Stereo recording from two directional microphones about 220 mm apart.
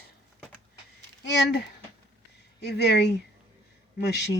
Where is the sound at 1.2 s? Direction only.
55° left (ahead or behind).